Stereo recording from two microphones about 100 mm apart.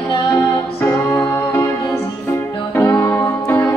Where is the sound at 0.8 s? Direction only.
20° left (ahead or behind).